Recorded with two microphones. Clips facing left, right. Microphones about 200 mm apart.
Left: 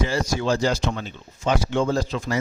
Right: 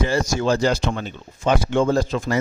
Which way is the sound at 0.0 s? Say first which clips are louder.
Right 3 dB; 50° right (ahead or behind).